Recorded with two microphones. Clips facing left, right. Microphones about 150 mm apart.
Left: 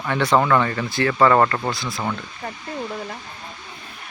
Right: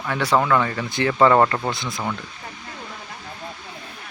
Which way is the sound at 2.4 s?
90° left.